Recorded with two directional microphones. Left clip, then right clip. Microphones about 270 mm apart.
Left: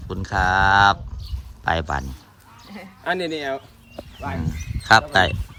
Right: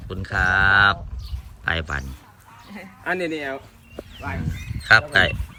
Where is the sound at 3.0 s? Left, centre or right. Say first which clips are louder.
Left 1 dB; left.